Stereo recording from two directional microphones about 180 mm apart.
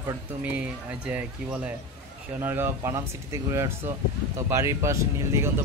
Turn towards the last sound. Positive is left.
turn(degrees=-15)  # may be behind; listen again after turning